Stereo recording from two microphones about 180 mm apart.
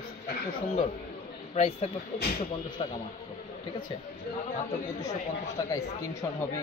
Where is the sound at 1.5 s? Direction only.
35° left (ahead or behind).